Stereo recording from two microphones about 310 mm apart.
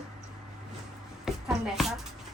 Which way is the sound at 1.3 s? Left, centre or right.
Centre.